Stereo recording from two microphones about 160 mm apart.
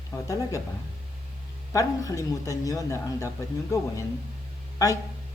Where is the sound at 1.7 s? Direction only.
20° left (ahead or behind).